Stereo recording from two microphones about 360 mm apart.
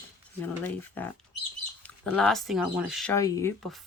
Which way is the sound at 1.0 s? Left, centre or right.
Centre.